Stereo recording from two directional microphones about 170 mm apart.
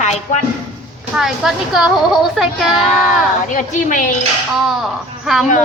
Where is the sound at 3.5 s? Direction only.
50° left (ahead or behind).